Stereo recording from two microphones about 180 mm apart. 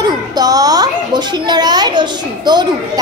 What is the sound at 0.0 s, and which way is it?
A child's voice, 20° right (ahead or behind).